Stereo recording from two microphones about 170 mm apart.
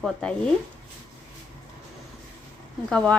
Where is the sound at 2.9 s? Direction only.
5° left (ahead or behind).